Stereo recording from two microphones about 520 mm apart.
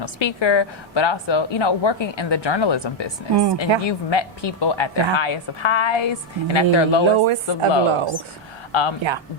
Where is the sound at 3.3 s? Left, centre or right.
Right.